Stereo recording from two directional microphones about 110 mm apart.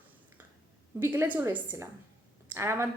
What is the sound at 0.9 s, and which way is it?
A woman's voice, 20° right (ahead or behind).